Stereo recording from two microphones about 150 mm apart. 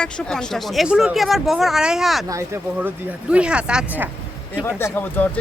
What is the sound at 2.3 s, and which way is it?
Speech, 20° right (ahead or behind).